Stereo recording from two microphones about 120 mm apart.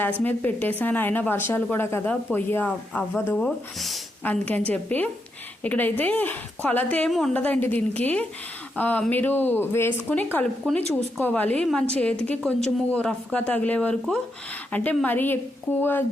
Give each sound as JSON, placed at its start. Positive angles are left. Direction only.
{"t": 0.2, "sound": "a woman's voice", "side_deg": 15}
{"t": 4.2, "sound": "a woman's voice", "side_deg": 15}
{"t": 7.1, "sound": "a woman's voice", "side_deg": 0}
{"t": 7.3, "sound": "a woman's voice", "side_deg": 15}